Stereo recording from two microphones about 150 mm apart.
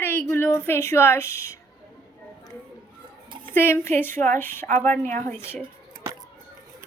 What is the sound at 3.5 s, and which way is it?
A woman's voice, 15° left (ahead or behind).